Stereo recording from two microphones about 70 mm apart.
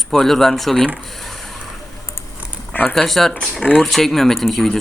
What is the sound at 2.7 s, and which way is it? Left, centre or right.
Speech, left.